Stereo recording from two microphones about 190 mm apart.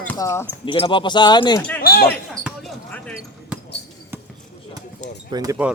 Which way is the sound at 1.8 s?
55° left (ahead or behind).